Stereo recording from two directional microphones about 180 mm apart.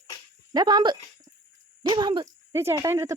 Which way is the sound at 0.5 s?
25° right (ahead or behind).